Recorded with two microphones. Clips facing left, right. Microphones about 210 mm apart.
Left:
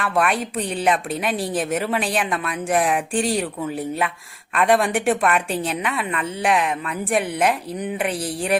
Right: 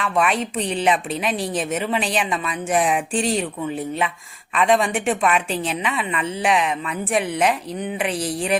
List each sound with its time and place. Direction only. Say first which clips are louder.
0.0 s a woman's voice: even; centre (ahead or behind)